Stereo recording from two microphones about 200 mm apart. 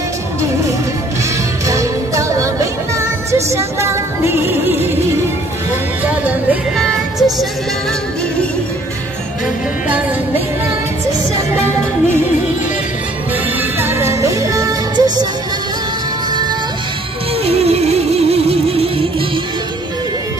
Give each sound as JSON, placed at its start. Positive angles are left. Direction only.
{"t": 1.7, "sound": "music", "side_deg": -15}
{"t": 6.5, "sound": "music", "side_deg": 0}
{"t": 13.6, "sound": "music", "side_deg": -10}
{"t": 17.5, "sound": "music", "side_deg": -30}